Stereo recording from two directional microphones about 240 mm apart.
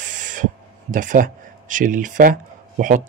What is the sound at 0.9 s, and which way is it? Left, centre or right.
Speech, right.